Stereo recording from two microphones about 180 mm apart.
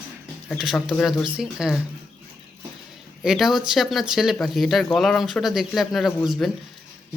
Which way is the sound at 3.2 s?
Centre (ahead or behind).